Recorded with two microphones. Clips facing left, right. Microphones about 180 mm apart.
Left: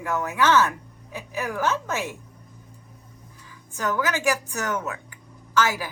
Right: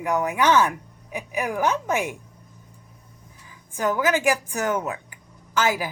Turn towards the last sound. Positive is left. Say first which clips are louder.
# right 1 dB
turn(degrees=-15)  # may be behind; listen again after turning